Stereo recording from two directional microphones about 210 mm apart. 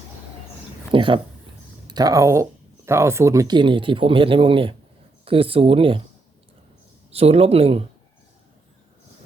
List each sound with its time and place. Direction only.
0.9 s speech: 25° right (ahead or behind)
7.1 s speech: 30° right (ahead or behind)